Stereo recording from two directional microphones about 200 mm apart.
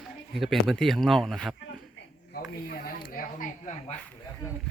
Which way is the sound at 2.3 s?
50° left (ahead or behind).